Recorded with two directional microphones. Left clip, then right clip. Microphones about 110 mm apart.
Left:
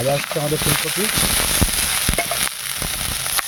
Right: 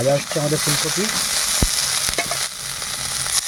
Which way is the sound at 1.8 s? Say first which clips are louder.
Even; 15° left (ahead or behind).